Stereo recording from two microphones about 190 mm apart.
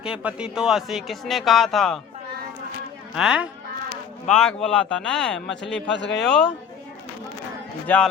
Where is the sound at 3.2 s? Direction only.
5° right (ahead or behind).